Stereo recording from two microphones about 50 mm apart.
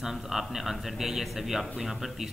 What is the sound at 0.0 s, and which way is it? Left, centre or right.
A man's voice, centre.